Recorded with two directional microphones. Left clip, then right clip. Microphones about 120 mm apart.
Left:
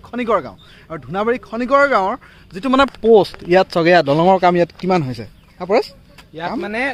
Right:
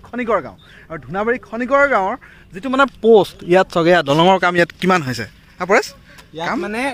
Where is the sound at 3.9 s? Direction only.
10° left (ahead or behind).